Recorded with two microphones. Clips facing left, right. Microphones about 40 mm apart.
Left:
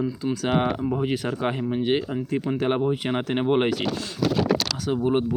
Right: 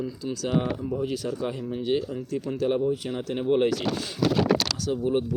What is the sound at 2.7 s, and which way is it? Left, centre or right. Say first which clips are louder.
Speech: left 2 dB; left.